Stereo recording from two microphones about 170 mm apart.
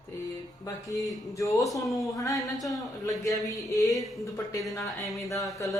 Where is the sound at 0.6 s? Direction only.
20° left (ahead or behind).